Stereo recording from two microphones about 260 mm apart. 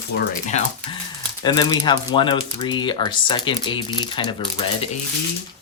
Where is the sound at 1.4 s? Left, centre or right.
Centre.